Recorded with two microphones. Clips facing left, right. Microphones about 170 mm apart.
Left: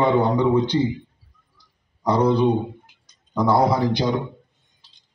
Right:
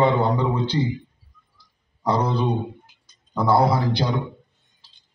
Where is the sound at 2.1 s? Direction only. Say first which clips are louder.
Left 4 dB; 15° left (ahead or behind).